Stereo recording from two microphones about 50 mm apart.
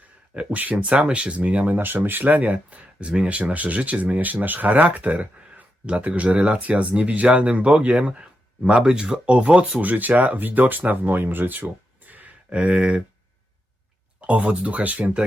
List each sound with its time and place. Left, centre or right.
0.3 s speech: right
1.9 s speech: right
9.8 s speech: right
11.6 s a sound: right
12.5 s speech: right
14.2 s speech: right